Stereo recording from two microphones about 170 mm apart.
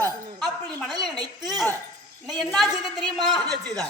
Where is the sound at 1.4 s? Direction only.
Centre (ahead or behind).